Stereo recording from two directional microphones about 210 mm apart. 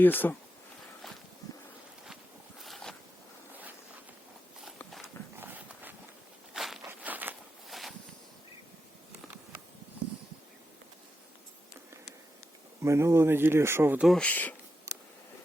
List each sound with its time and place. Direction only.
0.0 s speech: 10° left (ahead or behind)
1.0 s walk: centre (ahead or behind)
2.6 s a sound: centre (ahead or behind)
4.8 s horse: centre (ahead or behind)
5.4 s clip-clop: 10° right (ahead or behind)
6.5 s walk: centre (ahead or behind)
12.8 s speech: 15° right (ahead or behind); by 14.5 s 5° left (ahead or behind)